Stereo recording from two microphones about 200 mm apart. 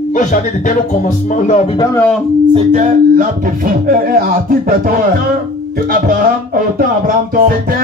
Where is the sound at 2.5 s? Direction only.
35° right (ahead or behind).